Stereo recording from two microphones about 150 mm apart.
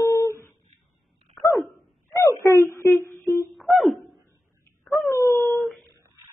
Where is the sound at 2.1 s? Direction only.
20° left (ahead or behind).